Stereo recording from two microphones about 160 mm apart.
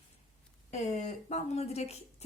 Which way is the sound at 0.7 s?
45° left (ahead or behind).